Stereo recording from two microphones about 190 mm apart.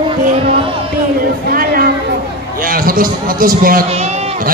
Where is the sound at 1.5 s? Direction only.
50° right (ahead or behind).